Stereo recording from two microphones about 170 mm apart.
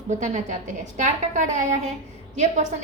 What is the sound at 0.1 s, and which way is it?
A woman's voice, 45° right (ahead or behind).